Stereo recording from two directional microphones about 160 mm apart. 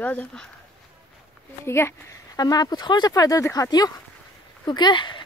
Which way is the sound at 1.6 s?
15° left (ahead or behind).